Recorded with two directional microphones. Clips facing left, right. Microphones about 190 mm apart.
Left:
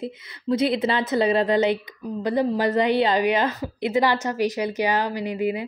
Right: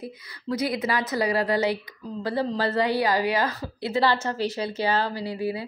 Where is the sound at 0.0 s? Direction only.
25° left (ahead or behind).